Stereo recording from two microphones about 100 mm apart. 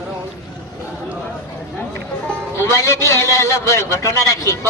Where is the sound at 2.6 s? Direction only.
30° left (ahead or behind).